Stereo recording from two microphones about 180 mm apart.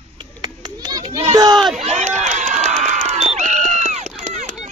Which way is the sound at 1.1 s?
35° right (ahead or behind).